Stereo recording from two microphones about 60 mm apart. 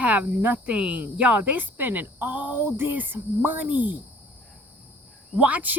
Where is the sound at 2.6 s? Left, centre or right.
Right.